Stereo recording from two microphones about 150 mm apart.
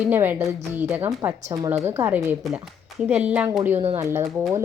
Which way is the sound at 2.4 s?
Centre (ahead or behind).